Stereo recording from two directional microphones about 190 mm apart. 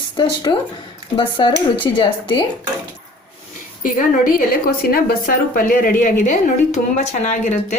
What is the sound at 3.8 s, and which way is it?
A woman's voice, 45° left (ahead or behind).